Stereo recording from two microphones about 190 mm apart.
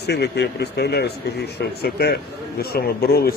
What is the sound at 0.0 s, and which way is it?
Speech, 60° left (ahead or behind).